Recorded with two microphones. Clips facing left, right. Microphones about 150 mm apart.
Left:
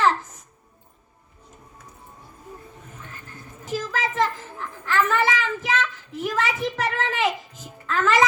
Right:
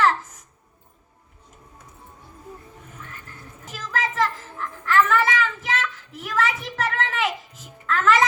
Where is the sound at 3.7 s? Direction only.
35° left (ahead or behind).